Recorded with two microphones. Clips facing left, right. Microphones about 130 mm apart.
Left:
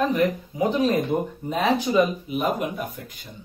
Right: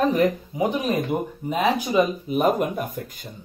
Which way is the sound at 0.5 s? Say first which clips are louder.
Left 2 dB; 15° right (ahead or behind).